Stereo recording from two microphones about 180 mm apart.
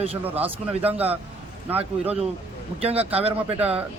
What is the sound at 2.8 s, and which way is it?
Speech, 35° right (ahead or behind).